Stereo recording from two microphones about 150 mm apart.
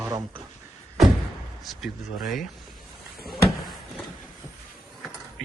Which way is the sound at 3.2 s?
Centre (ahead or behind).